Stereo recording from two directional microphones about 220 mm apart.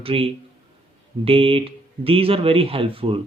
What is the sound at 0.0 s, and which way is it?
Speech, 25° right (ahead or behind).